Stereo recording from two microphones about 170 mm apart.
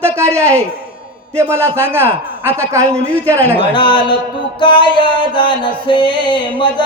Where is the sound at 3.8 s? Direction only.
30° left (ahead or behind).